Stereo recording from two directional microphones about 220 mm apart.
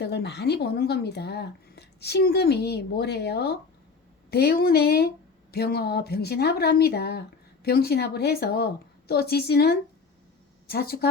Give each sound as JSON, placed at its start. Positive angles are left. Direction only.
{"t": 0.0, "sound": "speech", "side_deg": 50}